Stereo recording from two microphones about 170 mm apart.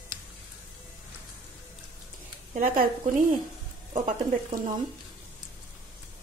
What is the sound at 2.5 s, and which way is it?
Speech, 60° right (ahead or behind).